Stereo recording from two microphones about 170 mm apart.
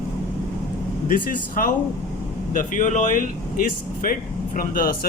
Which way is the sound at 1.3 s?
55° left (ahead or behind).